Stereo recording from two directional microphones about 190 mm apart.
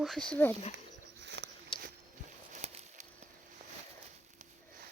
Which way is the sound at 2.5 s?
35° right (ahead or behind).